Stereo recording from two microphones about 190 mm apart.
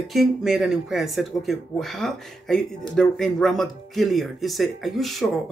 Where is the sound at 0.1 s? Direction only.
Centre (ahead or behind).